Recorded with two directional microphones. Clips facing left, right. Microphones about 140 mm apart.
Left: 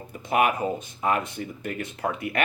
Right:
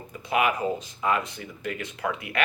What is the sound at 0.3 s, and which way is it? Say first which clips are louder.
Speech: left 1 dB; 50° left (ahead or behind).